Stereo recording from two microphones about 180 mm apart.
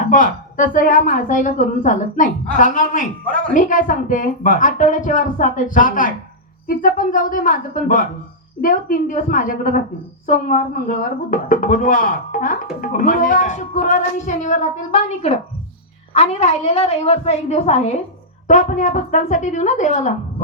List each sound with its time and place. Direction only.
0.1 s a woman's voice: 50° left (ahead or behind)